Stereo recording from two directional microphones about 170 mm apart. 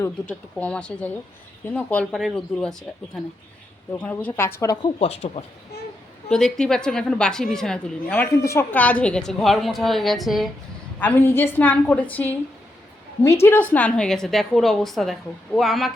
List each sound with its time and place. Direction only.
0.0 s a woman's voice: 5° left (ahead or behind)
4.0 s a woman's voice: 10° left (ahead or behind)
4.6 s speech: 25° left (ahead or behind)
4.9 s speech: 35° left (ahead or behind)
6.3 s a woman's voice: 5° left (ahead or behind)
11.0 s a woman's voice: 10° left (ahead or behind)
13.4 s a woman's voice: 10° left (ahead or behind)